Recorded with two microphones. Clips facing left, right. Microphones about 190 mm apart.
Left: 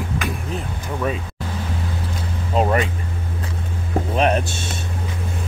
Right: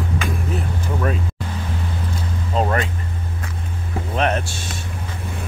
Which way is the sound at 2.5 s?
15° left (ahead or behind).